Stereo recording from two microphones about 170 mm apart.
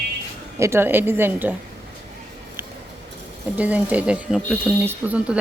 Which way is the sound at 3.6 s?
10° right (ahead or behind).